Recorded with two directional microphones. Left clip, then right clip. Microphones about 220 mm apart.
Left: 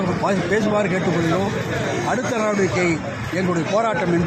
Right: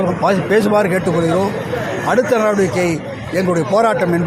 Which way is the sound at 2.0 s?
40° right (ahead or behind).